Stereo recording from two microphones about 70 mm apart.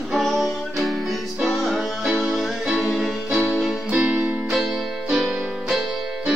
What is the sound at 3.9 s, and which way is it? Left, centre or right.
Music, centre.